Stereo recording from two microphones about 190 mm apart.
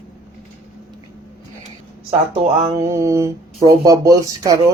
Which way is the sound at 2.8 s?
15° right (ahead or behind).